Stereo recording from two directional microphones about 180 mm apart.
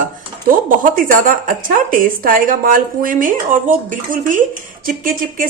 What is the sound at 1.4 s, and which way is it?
A woman's voice, 50° right (ahead or behind).